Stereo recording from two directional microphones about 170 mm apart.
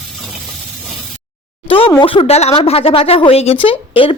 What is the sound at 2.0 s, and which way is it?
A woman's voice, 35° left (ahead or behind).